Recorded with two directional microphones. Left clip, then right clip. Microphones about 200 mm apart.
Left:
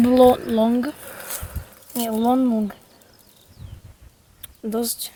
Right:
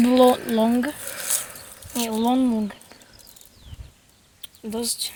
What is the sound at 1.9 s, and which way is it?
Speech, 40° left (ahead or behind).